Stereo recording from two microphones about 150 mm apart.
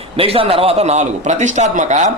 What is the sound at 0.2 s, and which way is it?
A man's voice, 40° right (ahead or behind).